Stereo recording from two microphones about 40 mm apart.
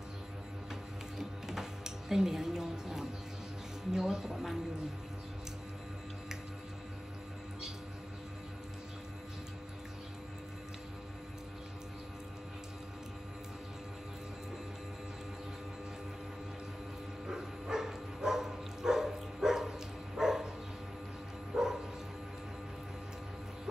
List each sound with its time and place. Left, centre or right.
1.1 s music: centre
3.9 s speech: centre
17.3 s dog: centre
21.5 s bow-wow: centre